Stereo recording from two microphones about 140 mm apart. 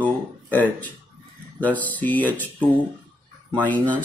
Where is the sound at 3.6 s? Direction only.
10° left (ahead or behind).